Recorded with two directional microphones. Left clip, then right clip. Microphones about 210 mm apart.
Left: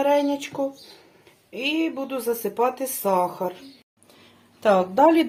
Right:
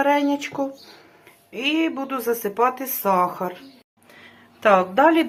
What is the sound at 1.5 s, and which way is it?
Speech, 5° right (ahead or behind).